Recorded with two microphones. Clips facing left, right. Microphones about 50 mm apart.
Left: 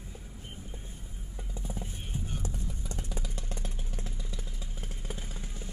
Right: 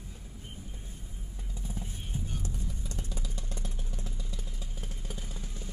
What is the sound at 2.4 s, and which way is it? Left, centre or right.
Vehicle, left.